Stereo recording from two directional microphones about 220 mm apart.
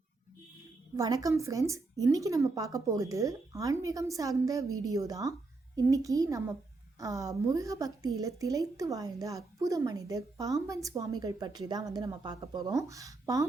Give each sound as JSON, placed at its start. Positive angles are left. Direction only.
{"t": 0.9, "sound": "a woman's voice", "side_deg": -15}